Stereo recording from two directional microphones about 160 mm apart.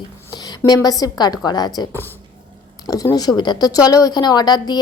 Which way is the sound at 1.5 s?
25° left (ahead or behind).